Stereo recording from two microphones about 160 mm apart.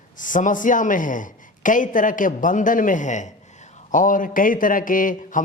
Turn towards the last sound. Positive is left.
turn(degrees=55)  # may be behind; listen again after turning